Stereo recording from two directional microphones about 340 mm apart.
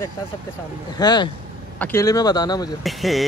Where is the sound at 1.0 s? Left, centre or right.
Centre.